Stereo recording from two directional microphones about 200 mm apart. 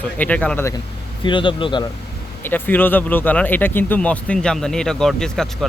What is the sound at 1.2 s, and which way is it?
Speech, 25° left (ahead or behind).